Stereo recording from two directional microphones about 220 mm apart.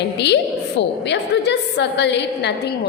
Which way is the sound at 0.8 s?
50° left (ahead or behind).